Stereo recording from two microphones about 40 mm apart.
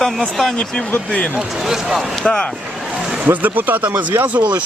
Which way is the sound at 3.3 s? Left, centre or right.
Right.